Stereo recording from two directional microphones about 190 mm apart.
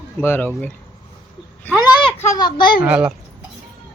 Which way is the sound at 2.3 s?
20° left (ahead or behind).